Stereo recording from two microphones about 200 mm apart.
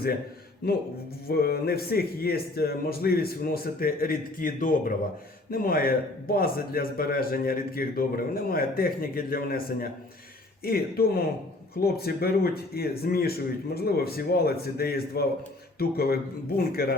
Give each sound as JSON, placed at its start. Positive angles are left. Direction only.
{"t": 1.3, "sound": "a man's voice", "side_deg": 50}
{"t": 10.6, "sound": "a man's voice", "side_deg": 50}